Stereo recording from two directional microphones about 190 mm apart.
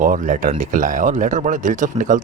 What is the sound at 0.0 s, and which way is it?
A man's voice, 45° right (ahead or behind).